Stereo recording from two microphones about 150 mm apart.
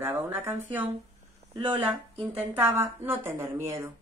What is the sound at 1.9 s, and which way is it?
Speech, 10° right (ahead or behind).